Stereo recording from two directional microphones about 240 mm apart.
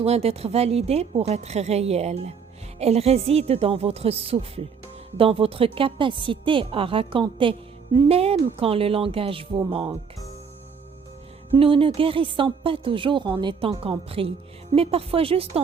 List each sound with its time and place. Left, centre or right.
0.0 s a woman's voice: right
11.5 s a woman's voice: right